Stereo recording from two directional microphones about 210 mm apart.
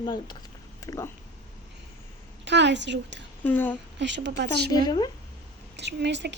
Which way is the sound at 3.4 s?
10° left (ahead or behind).